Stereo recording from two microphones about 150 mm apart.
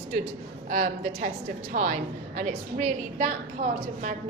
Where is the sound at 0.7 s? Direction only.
60° right (ahead or behind).